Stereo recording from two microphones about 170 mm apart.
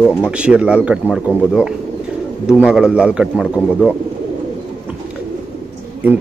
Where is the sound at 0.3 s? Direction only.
5° right (ahead or behind).